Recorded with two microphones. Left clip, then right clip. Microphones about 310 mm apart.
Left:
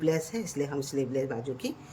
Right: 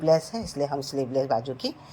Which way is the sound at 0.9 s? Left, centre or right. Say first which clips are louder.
Right 5 dB; right.